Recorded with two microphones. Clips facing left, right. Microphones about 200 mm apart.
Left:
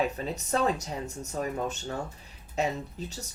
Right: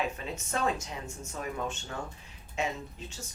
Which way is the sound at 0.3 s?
35° left (ahead or behind).